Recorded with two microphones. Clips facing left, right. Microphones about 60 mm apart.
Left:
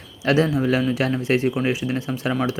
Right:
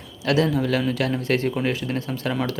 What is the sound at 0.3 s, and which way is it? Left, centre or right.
A man's voice, left.